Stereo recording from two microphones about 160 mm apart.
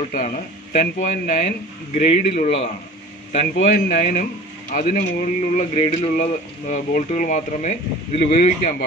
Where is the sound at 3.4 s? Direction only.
60° left (ahead or behind).